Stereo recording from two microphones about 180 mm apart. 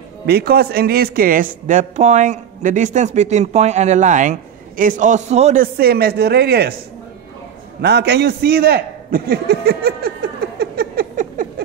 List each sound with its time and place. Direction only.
0.3 s a woman's voice: 60° right (ahead or behind); by 5.6 s 40° right (ahead or behind)
5.6 s speech: 60° right (ahead or behind)
7.8 s a man's voice: 65° right (ahead or behind)